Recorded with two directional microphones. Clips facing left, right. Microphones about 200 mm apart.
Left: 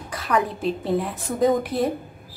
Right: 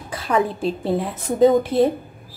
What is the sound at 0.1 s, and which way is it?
A woman's voice, 30° right (ahead or behind).